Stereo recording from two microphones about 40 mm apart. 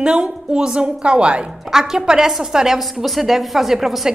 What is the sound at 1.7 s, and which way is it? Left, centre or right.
A woman's voice, centre.